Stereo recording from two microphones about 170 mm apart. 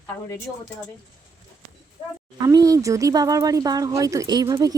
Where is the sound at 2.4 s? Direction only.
20° right (ahead or behind).